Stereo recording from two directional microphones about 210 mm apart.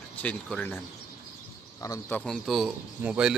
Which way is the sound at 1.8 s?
15° left (ahead or behind).